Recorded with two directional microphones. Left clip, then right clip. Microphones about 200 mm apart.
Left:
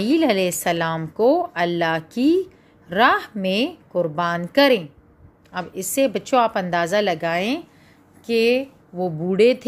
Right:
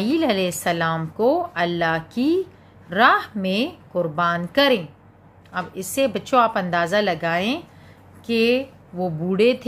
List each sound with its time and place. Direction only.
0.0 s speech: 30° left (ahead or behind)